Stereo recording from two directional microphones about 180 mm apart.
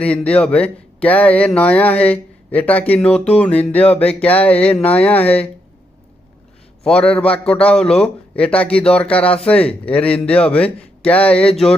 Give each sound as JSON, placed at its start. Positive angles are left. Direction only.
{"t": 0.0, "sound": "speech", "side_deg": 5}
{"t": 6.8, "sound": "speech", "side_deg": 5}